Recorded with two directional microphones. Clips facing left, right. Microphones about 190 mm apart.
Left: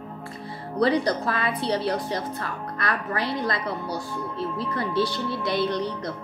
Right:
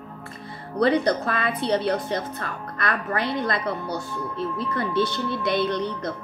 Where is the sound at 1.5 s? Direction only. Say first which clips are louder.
Right 3 dB; 20° right (ahead or behind).